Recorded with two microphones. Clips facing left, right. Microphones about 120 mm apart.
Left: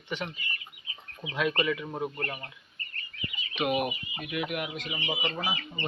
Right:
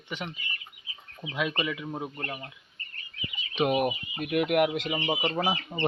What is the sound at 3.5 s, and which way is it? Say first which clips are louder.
Speech: right 3 dB; 35° right (ahead or behind).